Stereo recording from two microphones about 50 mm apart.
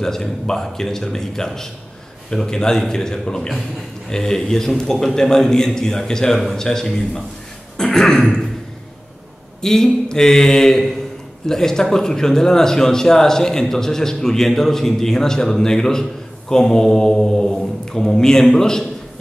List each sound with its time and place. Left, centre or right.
0.0 s speech: centre
7.7 s throat clearing: centre
9.6 s speech: centre